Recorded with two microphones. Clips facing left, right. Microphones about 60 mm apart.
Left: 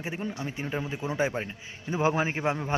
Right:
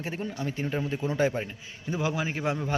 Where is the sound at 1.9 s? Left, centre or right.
Left.